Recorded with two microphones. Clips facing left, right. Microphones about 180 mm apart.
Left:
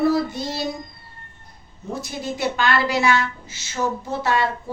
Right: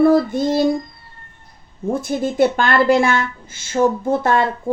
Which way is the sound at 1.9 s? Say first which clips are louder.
Right 10 dB; 50° right (ahead or behind).